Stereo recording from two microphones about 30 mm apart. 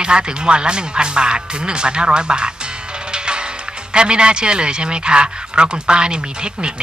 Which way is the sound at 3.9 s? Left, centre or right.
Right.